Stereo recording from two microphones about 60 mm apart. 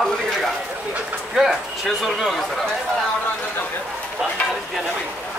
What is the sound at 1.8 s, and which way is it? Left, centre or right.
Speech, centre.